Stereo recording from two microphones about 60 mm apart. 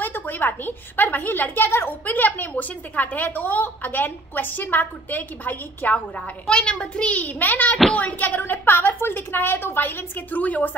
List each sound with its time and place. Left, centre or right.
0.0 s a woman's voice: left
6.1 s a child's voice: centre